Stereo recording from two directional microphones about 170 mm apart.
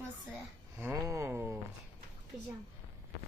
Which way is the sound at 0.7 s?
15° right (ahead or behind).